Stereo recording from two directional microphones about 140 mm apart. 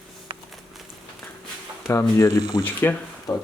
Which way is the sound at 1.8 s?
20° left (ahead or behind).